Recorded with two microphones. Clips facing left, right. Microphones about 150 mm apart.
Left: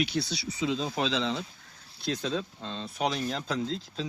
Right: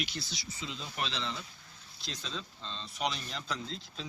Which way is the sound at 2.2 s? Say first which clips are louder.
Left 10 dB; 55° left (ahead or behind).